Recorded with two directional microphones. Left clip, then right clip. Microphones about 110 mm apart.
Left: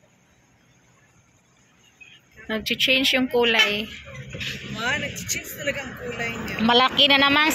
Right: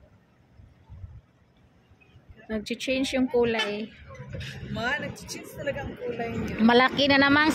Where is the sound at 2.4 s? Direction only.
5° right (ahead or behind).